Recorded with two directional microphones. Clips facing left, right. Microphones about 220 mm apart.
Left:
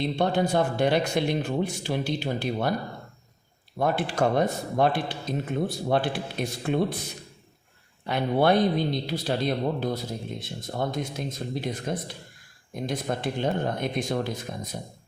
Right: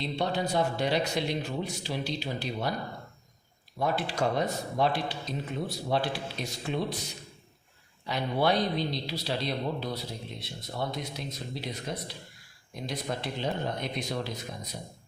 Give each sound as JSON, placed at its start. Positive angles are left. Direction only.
{"t": 0.0, "sound": "speech", "side_deg": 50}
{"t": 3.8, "sound": "speech", "side_deg": 50}